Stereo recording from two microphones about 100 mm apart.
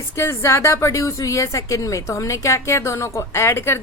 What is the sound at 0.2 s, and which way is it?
A woman's voice, 25° left (ahead or behind).